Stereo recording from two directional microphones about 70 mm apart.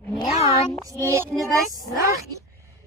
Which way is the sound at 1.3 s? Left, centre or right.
Centre.